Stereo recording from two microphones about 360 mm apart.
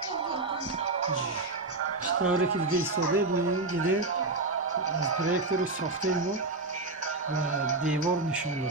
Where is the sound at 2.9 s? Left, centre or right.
Right.